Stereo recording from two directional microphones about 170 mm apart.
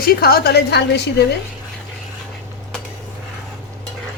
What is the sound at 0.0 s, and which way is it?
A woman's voice, 65° left (ahead or behind).